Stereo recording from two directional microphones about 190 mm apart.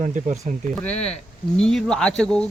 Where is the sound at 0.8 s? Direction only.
5° left (ahead or behind).